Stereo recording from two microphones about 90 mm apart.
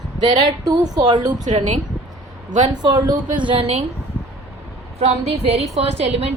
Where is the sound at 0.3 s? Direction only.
50° right (ahead or behind).